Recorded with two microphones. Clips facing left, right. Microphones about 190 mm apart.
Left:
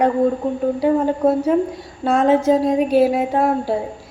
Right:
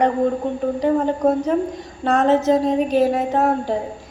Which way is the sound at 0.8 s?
5° left (ahead or behind).